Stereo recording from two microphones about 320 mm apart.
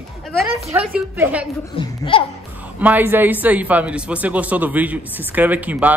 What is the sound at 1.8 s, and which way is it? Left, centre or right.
Speech, centre.